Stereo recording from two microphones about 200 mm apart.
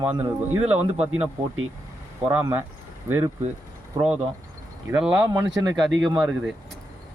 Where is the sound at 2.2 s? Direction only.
10° right (ahead or behind).